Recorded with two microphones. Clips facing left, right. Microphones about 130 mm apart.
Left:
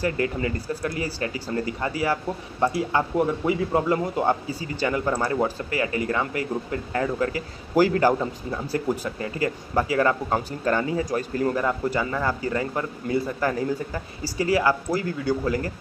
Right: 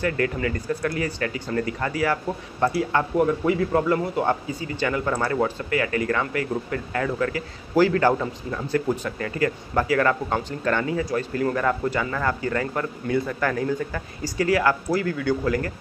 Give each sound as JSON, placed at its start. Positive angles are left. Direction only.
{"t": 0.0, "sound": "a man's voice", "side_deg": 25}
{"t": 4.5, "sound": "a man's voice", "side_deg": 35}
{"t": 8.8, "sound": "speech", "side_deg": 10}
{"t": 9.2, "sound": "a man's voice", "side_deg": 25}